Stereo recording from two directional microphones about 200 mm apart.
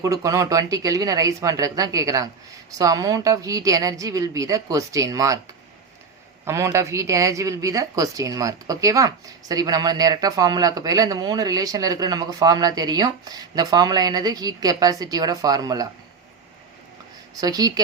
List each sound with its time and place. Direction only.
0.0 s a woman's voice: 15° right (ahead or behind)
6.4 s a woman's voice: 15° right (ahead or behind)
17.4 s a woman's voice: 20° right (ahead or behind)